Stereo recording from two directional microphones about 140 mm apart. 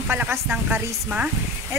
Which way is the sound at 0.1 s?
15° right (ahead or behind).